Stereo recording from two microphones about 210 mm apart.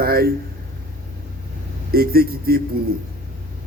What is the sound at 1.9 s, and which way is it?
Speech, 45° right (ahead or behind).